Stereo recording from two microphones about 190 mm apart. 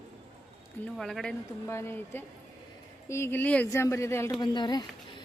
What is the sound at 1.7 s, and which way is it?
Speech, 15° left (ahead or behind).